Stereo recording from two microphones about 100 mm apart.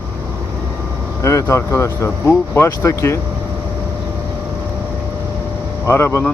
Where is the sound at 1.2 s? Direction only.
30° left (ahead or behind).